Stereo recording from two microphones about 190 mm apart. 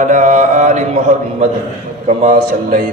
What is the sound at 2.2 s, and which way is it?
Speech, 45° right (ahead or behind).